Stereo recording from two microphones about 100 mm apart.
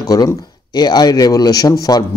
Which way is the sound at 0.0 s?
35° left (ahead or behind).